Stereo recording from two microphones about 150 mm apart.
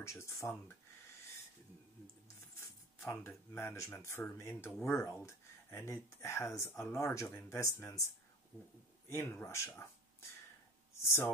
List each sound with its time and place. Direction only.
0.0 s speech: 20° left (ahead or behind)
3.0 s speech: 20° left (ahead or behind)
9.1 s speech: 15° left (ahead or behind)